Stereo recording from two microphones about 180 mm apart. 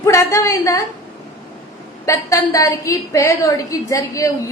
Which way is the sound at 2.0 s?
15° left (ahead or behind).